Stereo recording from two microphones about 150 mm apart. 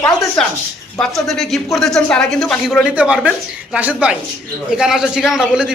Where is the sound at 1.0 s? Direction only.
Centre (ahead or behind).